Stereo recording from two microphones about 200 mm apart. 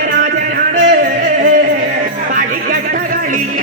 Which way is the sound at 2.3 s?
45° right (ahead or behind).